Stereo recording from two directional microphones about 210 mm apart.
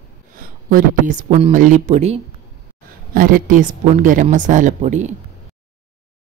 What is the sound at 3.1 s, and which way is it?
A woman's voice, 40° right (ahead or behind).